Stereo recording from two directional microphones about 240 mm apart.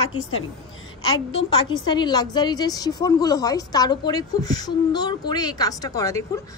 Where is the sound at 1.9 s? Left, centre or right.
Centre.